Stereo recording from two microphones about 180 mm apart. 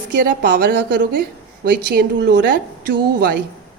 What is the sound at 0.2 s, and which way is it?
A woman's voice, 55° right (ahead or behind).